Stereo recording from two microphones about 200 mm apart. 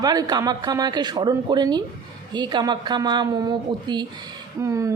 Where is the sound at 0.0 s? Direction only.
20° right (ahead or behind).